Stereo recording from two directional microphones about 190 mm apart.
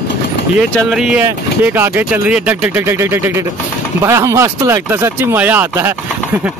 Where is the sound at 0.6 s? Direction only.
5° right (ahead or behind).